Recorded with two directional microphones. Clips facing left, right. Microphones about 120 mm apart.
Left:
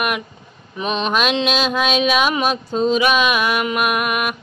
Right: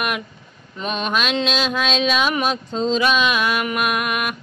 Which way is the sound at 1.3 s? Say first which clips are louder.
Left 2 dB; 15° left (ahead or behind).